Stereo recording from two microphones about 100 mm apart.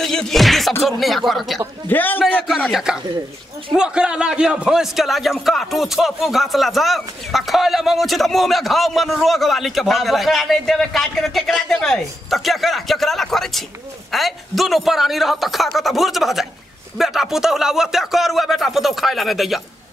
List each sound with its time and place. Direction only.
0.0 s music: 5° left (ahead or behind)
0.8 s a man's voice: centre (ahead or behind)
1.9 s a man's voice: 20° left (ahead or behind)
2.7 s a man's voice: 5° right (ahead or behind)